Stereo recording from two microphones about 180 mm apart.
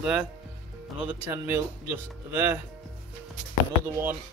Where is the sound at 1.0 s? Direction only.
15° right (ahead or behind).